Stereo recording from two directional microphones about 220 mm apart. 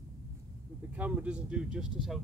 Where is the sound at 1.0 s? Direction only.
5° right (ahead or behind).